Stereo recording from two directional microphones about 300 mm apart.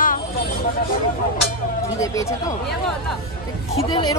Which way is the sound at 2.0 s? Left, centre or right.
Centre.